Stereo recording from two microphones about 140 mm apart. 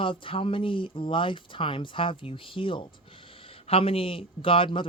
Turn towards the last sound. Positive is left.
turn(degrees=40)  # may be behind; listen again after turning